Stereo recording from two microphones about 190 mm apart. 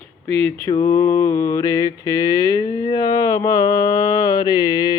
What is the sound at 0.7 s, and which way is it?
Mantra, 15° left (ahead or behind).